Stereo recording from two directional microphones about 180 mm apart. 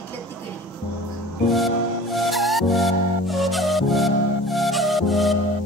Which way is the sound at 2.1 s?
Centre (ahead or behind).